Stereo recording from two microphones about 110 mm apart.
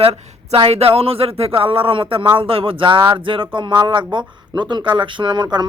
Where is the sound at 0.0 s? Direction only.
60° right (ahead or behind).